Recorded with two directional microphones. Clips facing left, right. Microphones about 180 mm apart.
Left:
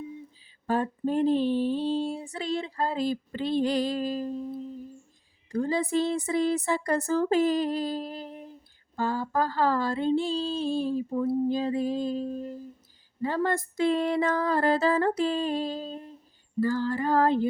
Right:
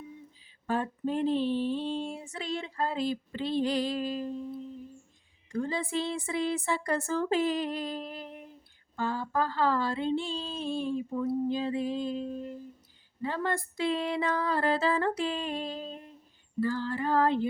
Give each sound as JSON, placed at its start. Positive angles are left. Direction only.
{"t": 0.7, "sound": "female singing", "side_deg": 40}
{"t": 13.2, "sound": "a sound", "side_deg": 40}
{"t": 16.6, "sound": "female singing", "side_deg": 40}